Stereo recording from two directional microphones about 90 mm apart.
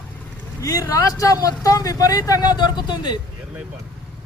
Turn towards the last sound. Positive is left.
turn(degrees=50)  # may be behind; listen again after turning